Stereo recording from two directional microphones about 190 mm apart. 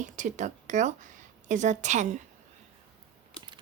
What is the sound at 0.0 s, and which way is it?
A woman's voice, 40° right (ahead or behind).